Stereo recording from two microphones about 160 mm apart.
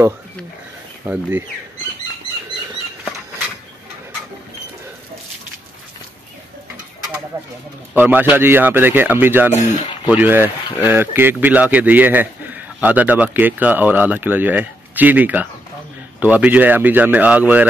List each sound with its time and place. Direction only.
1.0 s speech: 15° right (ahead or behind)
7.9 s speech: 10° right (ahead or behind)
9.5 s speech: 50° left (ahead or behind)
10.0 s speech: 10° right (ahead or behind)